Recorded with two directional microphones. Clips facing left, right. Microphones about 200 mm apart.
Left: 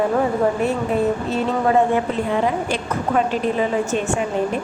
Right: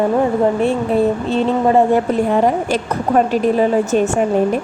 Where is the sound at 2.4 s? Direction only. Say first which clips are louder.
Right 5 dB; 45° right (ahead or behind).